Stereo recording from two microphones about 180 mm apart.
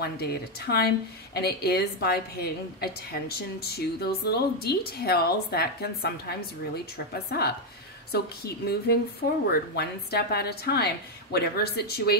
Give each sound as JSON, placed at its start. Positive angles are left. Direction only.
{"t": 0.0, "sound": "speech", "side_deg": 60}